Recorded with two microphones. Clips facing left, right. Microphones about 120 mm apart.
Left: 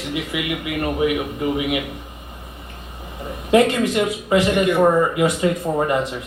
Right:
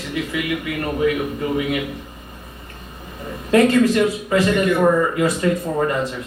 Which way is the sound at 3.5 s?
20° left (ahead or behind).